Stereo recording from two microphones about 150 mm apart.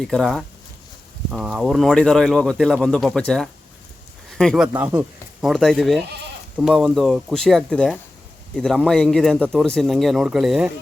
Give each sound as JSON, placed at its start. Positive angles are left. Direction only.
{"t": 0.0, "sound": "speech", "side_deg": 0}